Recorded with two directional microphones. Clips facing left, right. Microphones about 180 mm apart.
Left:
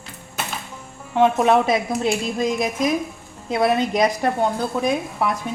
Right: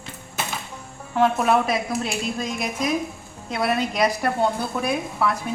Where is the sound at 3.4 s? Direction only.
25° left (ahead or behind).